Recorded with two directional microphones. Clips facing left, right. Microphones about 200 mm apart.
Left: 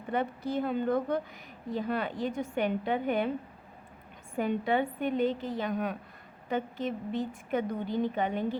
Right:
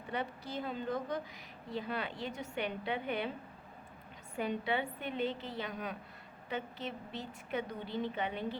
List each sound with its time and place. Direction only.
0.1 s a woman's voice: 55° left (ahead or behind)
4.4 s a woman's voice: 50° left (ahead or behind)